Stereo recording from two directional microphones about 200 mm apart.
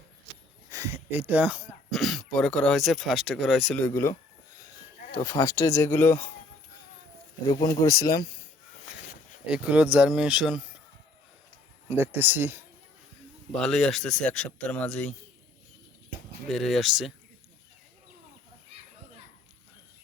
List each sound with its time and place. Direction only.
0.7 s speech: 15° right (ahead or behind)
3.8 s speech: 10° left (ahead or behind)
5.1 s speech: 15° left (ahead or behind)
7.4 s speech: 20° left (ahead or behind)
9.5 s speech: 5° right (ahead or behind)
11.9 s speech: 10° right (ahead or behind)
13.5 s speech: centre (ahead or behind)
16.5 s speech: centre (ahead or behind)